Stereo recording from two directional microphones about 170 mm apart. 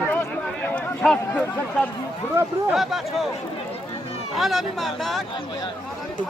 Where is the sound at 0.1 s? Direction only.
10° left (ahead or behind).